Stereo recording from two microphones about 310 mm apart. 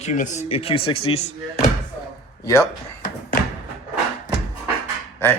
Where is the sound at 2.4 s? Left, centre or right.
Centre.